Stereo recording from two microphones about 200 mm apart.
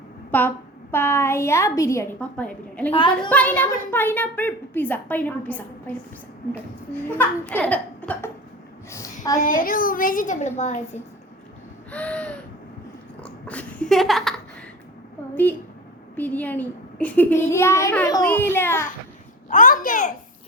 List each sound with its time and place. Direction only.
0.3 s a woman's voice: 10° left (ahead or behind)
7.1 s a woman's voice: 10° left (ahead or behind)
9.4 s a woman's voice: 45° left (ahead or behind)
11.9 s a woman's voice: 5° left (ahead or behind)
13.2 s a sound: 5° left (ahead or behind)
16.1 s a woman's voice: 10° left (ahead or behind)
19.5 s a woman's voice: 40° left (ahead or behind)